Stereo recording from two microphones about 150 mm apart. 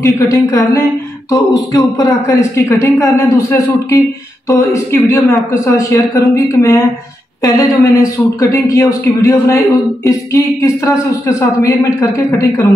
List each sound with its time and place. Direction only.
0.0 s speech: 20° left (ahead or behind)